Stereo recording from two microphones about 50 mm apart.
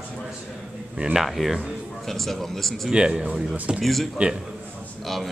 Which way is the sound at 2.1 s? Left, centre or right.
Centre.